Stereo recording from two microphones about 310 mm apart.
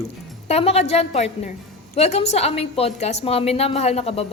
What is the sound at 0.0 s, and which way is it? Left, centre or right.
A woman's voice, centre.